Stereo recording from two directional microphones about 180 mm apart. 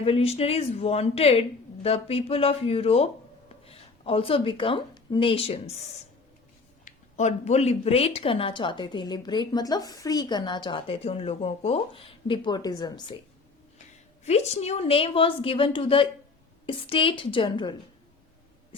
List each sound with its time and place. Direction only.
0.0 s a woman's voice: 35° left (ahead or behind)
6.8 s speech: 40° left (ahead or behind); by 13.1 s 25° left (ahead or behind)
14.3 s a woman's voice: 35° left (ahead or behind)